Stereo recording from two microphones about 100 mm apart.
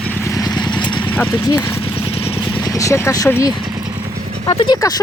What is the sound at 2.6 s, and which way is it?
Speech, 35° left (ahead or behind).